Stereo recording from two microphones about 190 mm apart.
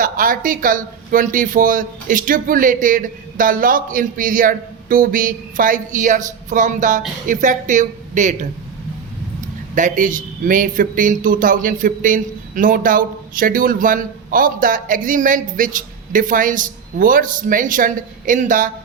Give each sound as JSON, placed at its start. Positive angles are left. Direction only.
{"t": 0.0, "sound": "a man's voice", "side_deg": -45}
{"t": 9.7, "sound": "a man's voice", "side_deg": -45}